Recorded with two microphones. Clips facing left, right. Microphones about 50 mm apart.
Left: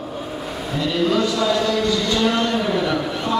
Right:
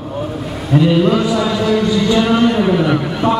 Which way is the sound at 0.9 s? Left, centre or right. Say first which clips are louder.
Right 6 dB; centre.